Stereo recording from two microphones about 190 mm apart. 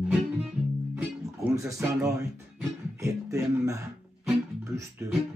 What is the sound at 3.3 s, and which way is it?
Speech, 15° right (ahead or behind).